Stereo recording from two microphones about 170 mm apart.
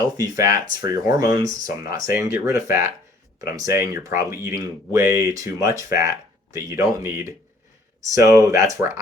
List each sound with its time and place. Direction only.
0.2 s speech: 20° right (ahead or behind)